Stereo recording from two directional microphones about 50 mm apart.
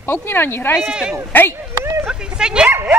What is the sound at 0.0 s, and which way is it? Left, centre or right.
Speech, left.